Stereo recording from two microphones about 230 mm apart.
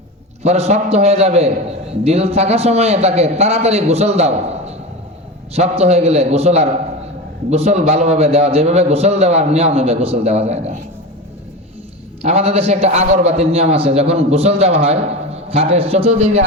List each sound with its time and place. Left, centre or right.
0.4 s a man's voice: right
5.5 s a man's voice: right
12.2 s a man's voice: right